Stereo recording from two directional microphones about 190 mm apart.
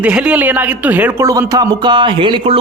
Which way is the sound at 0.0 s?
5° right (ahead or behind).